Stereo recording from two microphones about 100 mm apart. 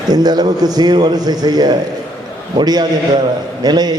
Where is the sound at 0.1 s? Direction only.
45° right (ahead or behind).